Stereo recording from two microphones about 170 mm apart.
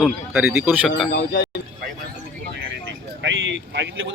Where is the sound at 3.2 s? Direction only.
90° right.